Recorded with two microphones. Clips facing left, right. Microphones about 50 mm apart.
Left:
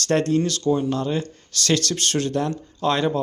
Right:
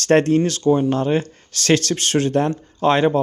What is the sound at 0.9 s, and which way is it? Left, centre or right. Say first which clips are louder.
Speech: right 5 dB; right.